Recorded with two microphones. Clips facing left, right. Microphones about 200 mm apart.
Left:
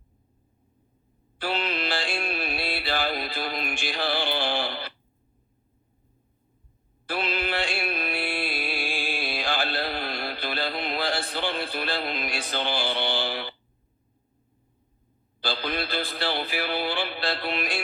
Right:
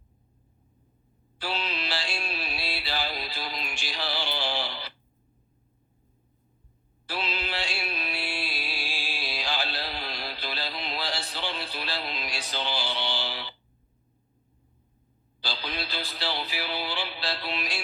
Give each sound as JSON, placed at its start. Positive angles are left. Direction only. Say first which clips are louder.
{"t": 1.4, "sound": "music", "louder": "left 4 dB", "side_deg": 55}
{"t": 7.1, "sound": "music", "louder": "left 5 dB", "side_deg": 55}
{"t": 15.4, "sound": "speech", "louder": "left 6 dB", "side_deg": 55}